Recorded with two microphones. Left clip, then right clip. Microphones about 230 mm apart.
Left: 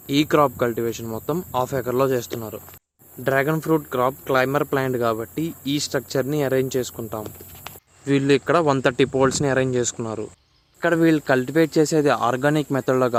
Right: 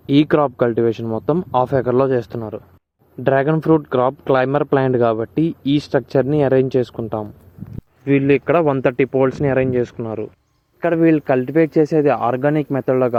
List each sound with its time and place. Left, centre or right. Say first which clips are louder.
0.1 s speech: right 3 dB; right
8.0 s speech: right 4 dB; centre